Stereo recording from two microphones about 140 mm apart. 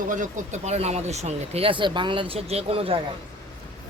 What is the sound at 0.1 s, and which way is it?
Speech, 60° right (ahead or behind).